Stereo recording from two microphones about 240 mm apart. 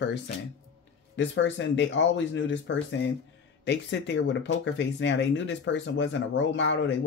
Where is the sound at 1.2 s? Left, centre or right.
Left.